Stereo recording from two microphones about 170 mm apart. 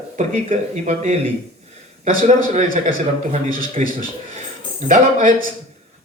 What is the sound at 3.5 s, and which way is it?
A man's voice, 55° right (ahead or behind).